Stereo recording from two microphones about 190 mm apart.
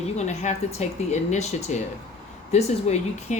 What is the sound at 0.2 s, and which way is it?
A woman's voice, 35° left (ahead or behind).